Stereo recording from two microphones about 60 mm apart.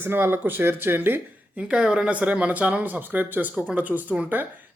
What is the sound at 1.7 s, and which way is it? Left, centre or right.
Speech, centre.